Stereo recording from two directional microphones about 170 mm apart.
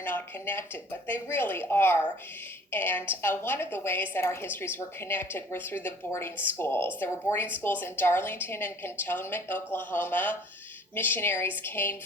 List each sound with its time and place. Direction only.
0.0 s a woman's voice: 10° left (ahead or behind)